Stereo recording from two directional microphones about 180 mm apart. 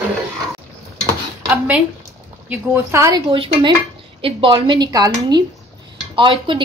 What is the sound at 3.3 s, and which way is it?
A woman's voice, 30° right (ahead or behind).